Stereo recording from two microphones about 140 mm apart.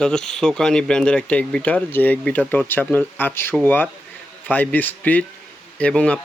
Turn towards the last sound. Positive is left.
turn(degrees=10)  # may be behind; listen again after turning